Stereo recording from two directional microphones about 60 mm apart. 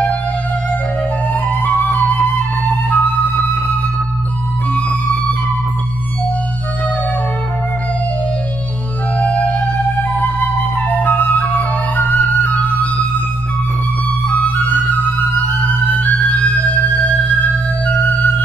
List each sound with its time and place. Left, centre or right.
1.3 s music: left
9.2 s music: left
12.0 s flute: left
14.3 s flute: left